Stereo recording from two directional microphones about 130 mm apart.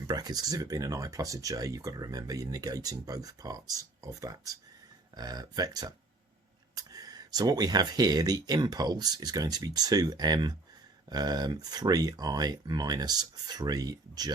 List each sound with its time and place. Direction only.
0.1 s speech: 30° right (ahead or behind)